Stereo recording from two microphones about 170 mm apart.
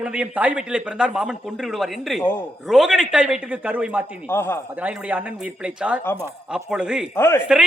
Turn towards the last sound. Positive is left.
turn(degrees=15)  # may be behind; listen again after turning